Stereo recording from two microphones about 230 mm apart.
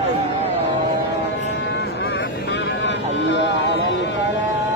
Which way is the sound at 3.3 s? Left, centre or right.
Left.